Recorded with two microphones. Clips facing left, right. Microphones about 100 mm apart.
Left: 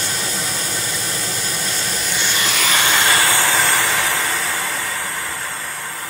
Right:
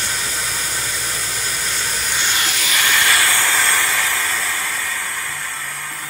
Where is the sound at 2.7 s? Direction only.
25° left (ahead or behind).